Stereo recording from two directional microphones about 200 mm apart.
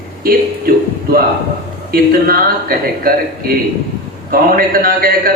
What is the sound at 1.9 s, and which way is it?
Speech, 45° right (ahead or behind).